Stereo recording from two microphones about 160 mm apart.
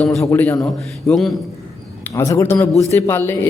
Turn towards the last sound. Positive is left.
turn(degrees=15)  # may be behind; listen again after turning